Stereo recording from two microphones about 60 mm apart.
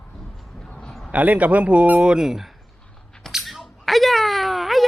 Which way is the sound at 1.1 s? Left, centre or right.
Right.